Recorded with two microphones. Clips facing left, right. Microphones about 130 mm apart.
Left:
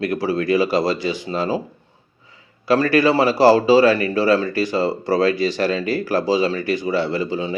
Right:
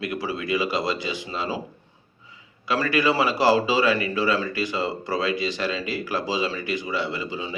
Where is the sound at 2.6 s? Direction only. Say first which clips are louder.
Left 7 dB; 35° left (ahead or behind).